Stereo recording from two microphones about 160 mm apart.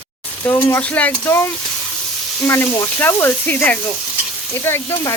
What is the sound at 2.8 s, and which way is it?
Speech, 15° left (ahead or behind).